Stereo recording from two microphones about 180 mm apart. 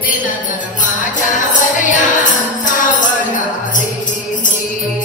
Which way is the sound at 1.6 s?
45° left (ahead or behind).